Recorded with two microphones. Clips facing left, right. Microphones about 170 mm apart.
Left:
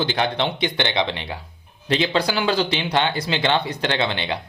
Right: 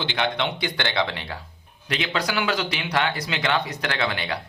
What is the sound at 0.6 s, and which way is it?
Speech, 20° left (ahead or behind).